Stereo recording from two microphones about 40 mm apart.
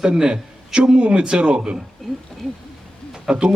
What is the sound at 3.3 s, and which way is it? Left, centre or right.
Speech, centre.